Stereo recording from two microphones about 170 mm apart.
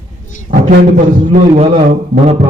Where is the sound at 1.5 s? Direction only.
35° right (ahead or behind).